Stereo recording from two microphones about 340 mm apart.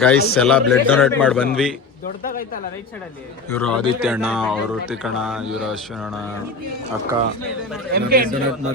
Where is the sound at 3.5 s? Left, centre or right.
Centre.